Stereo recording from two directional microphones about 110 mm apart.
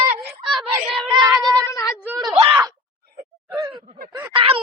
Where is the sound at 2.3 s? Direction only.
55° right (ahead or behind).